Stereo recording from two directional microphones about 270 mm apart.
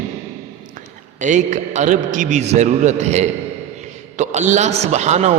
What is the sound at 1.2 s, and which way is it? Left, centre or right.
A man's voice, right.